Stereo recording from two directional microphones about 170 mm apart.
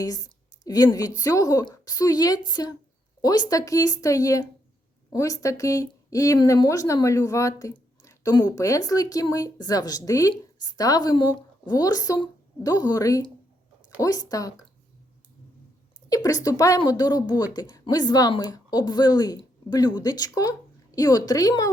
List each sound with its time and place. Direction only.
0.0 s speech: 20° left (ahead or behind)
16.0 s speech: 20° left (ahead or behind)